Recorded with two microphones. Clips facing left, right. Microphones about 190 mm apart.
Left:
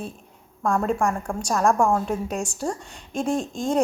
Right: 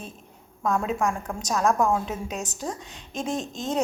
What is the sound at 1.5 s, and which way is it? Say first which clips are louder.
Speech: left 2 dB; centre (ahead or behind).